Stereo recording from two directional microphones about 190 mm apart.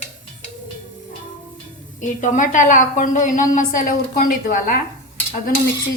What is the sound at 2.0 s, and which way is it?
A woman's voice, 40° left (ahead or behind).